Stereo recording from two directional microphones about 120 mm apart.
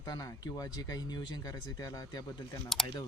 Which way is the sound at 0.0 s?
30° left (ahead or behind).